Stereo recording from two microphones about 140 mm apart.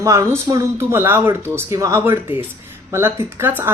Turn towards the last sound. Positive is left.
turn(degrees=-15)  # may be behind; listen again after turning